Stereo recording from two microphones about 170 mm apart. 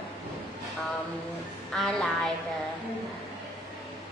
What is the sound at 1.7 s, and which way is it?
Speech, centre (ahead or behind).